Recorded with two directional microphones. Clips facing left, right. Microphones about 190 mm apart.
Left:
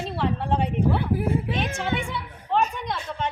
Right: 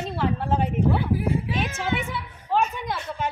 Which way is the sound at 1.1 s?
50° left (ahead or behind).